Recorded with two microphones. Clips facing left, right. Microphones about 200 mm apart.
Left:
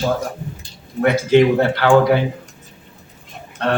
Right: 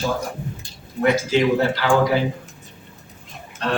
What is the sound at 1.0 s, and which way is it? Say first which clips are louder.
Speech: left 5 dB; 60° left (ahead or behind).